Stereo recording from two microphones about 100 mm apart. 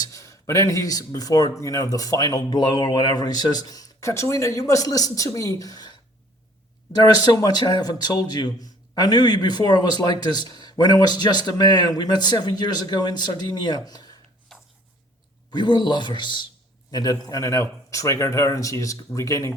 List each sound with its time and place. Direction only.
0.0 s a man's voice: 35° left (ahead or behind)
14.5 s a sound: 5° left (ahead or behind)
15.4 s a man's voice: 45° left (ahead or behind)